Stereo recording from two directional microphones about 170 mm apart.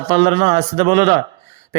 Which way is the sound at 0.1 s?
35° right (ahead or behind).